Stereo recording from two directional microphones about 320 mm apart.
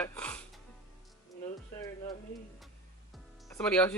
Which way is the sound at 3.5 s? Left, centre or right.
Centre.